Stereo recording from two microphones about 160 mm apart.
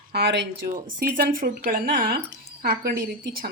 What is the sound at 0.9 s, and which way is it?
Speech, 60° right (ahead or behind).